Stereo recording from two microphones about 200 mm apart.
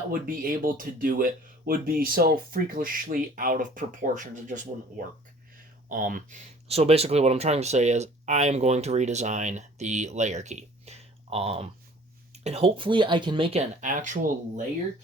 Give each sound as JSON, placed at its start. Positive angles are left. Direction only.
{"t": 0.1, "sound": "speech", "side_deg": -45}
{"t": 5.9, "sound": "speech", "side_deg": -45}